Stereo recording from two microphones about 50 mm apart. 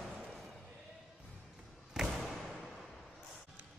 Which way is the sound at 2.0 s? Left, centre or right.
Centre.